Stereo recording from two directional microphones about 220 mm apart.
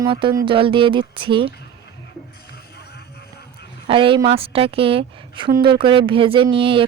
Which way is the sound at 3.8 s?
25° right (ahead or behind).